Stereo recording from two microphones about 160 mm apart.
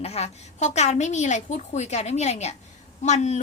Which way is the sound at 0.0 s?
40° left (ahead or behind).